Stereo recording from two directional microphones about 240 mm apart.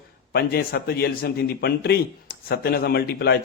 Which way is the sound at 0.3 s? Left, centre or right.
Left.